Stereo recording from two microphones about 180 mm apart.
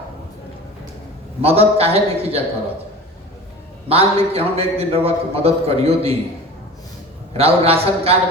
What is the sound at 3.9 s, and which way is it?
A man's voice, 35° right (ahead or behind).